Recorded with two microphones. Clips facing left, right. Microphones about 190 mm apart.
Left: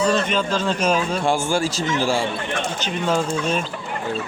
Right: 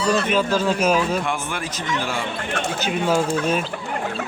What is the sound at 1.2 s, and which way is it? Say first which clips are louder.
Speech: left 6 dB; 30° left (ahead or behind).